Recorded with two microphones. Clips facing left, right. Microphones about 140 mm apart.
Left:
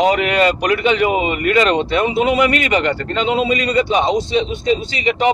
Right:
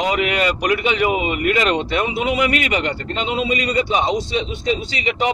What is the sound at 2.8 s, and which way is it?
Speech, 90° left.